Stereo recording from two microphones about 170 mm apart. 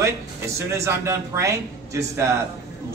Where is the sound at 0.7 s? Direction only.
15° right (ahead or behind).